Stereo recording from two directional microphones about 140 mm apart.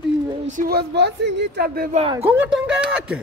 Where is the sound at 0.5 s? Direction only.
70° right (ahead or behind).